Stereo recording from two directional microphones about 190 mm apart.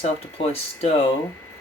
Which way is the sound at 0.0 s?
30° left (ahead or behind).